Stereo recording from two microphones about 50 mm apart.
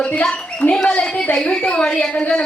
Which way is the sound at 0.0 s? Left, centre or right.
Centre.